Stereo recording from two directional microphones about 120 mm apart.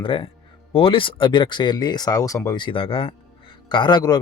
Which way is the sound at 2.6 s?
45° left (ahead or behind).